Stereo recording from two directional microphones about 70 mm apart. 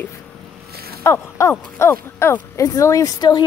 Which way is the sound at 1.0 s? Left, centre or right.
Left.